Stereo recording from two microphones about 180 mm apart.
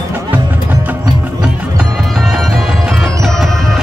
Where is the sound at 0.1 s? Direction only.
10° right (ahead or behind).